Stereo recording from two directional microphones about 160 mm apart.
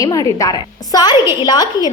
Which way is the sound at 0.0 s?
20° left (ahead or behind).